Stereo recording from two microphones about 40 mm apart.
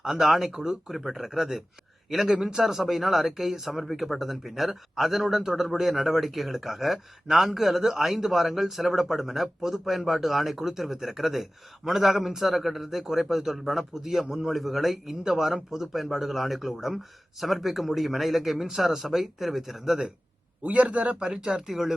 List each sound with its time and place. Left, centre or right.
0.0 s a man's voice: centre
14.5 s a man's voice: centre
20.6 s a man's voice: right
21.2 s a man's voice: centre